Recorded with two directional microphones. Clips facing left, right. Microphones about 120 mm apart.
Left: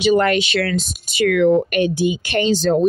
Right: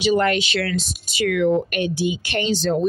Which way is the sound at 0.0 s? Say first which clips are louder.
Left 3 dB; 60° left (ahead or behind).